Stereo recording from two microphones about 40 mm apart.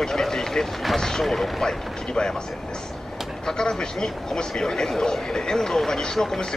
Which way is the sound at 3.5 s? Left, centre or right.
Centre.